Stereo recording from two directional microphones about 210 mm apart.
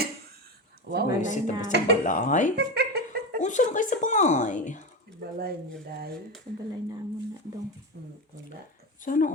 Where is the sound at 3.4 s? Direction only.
35° left (ahead or behind).